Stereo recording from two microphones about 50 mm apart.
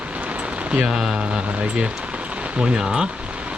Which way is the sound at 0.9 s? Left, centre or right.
Centre.